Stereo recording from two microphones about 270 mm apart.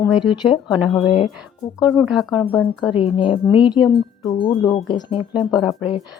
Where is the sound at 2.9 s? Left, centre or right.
Centre.